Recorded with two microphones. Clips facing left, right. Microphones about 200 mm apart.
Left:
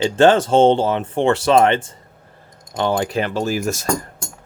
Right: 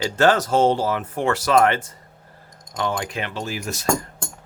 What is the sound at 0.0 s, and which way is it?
Speech, 25° left (ahead or behind).